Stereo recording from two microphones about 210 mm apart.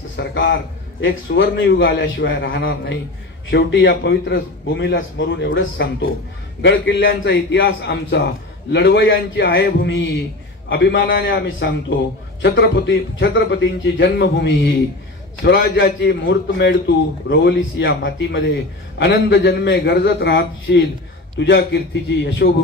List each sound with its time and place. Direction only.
0.1 s a man's voice: 60° left (ahead or behind)